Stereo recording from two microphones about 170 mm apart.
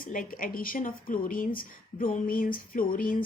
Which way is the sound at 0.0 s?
55° left (ahead or behind).